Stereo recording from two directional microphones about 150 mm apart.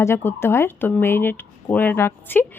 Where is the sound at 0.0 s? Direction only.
15° left (ahead or behind).